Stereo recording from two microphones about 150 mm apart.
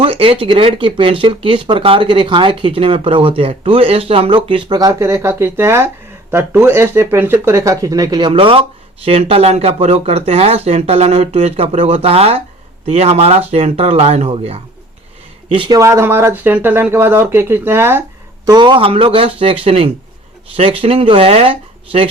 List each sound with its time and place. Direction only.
0.0 s speech: 40° right (ahead or behind)
15.8 s speech: 20° right (ahead or behind)
18.4 s speech: 30° right (ahead or behind)